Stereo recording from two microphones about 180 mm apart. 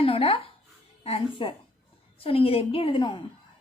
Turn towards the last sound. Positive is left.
turn(degrees=30)  # may be behind; listen again after turning